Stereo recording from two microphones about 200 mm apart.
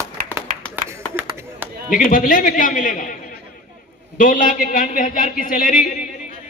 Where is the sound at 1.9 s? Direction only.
45° left (ahead or behind).